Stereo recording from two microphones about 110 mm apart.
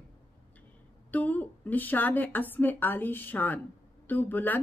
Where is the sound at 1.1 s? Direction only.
15° left (ahead or behind).